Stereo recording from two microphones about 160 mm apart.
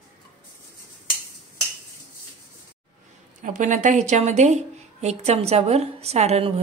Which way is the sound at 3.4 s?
50° right (ahead or behind).